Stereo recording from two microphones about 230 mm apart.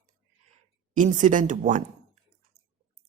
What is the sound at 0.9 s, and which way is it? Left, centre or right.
Speech, right.